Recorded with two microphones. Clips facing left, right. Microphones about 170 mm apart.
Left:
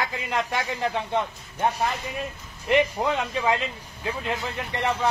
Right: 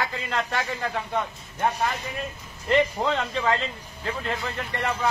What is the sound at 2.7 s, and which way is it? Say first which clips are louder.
A man's voice: even; 10° left (ahead or behind).